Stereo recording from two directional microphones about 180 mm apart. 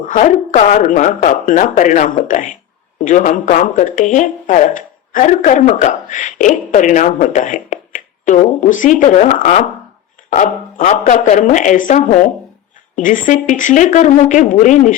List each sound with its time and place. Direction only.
0.0 s speech: 45° left (ahead or behind)